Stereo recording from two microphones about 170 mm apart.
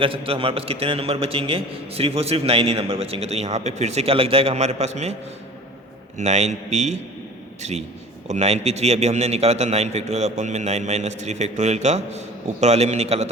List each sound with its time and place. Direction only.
0.0 s a man's voice: 35° right (ahead or behind)
6.1 s a man's voice: 40° right (ahead or behind)